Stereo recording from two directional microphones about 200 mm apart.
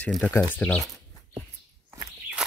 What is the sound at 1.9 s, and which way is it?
Walk, 15° right (ahead or behind).